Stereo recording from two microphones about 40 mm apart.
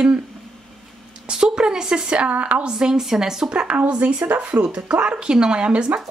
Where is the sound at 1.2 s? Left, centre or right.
Right.